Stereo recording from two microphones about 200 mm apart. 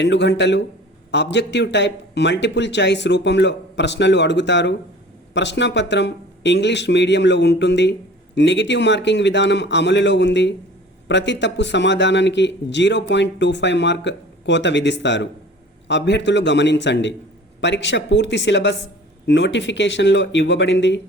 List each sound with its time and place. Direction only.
0.0 s speech: 60° left (ahead or behind)